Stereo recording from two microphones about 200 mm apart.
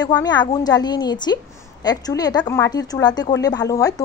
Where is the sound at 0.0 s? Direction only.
20° left (ahead or behind).